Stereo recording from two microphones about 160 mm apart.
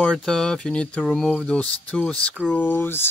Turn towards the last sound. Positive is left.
turn(degrees=15)  # may be behind; listen again after turning